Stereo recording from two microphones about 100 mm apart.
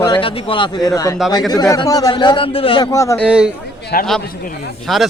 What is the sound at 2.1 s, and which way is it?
Speech, 55° left (ahead or behind).